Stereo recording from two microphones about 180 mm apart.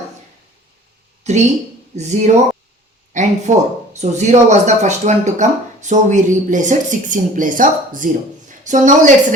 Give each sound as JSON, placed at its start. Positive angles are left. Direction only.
{"t": 1.2, "sound": "speech", "side_deg": -40}